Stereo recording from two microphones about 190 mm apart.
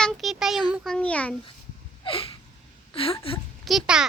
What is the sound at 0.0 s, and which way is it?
A child's voice, centre (ahead or behind).